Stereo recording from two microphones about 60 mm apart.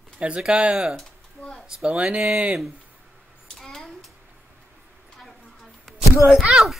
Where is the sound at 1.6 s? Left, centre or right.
Centre.